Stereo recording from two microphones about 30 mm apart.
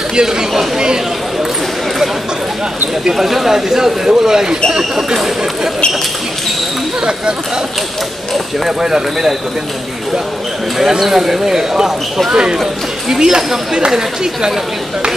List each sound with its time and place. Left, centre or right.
0.1 s speech: right
3.2 s speech: centre
8.6 s speech: centre
10.8 s speech: centre